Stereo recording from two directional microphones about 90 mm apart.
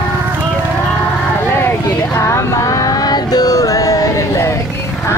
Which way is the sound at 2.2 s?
35° left (ahead or behind).